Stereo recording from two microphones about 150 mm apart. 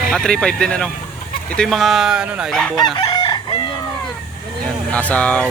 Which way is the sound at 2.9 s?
30° left (ahead or behind).